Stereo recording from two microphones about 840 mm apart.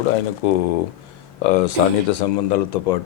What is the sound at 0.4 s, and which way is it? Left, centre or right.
Speech, left.